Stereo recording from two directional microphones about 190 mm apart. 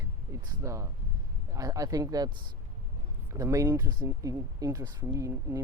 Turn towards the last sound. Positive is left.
turn(degrees=-15)  # may be behind; listen again after turning